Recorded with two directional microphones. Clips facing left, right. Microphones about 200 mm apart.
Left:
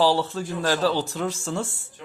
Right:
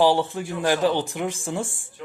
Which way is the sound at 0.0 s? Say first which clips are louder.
Right 2 dB; 15° right (ahead or behind).